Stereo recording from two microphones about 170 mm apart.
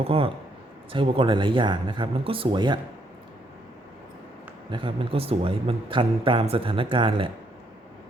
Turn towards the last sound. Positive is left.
turn(degrees=-30)  # may be behind; listen again after turning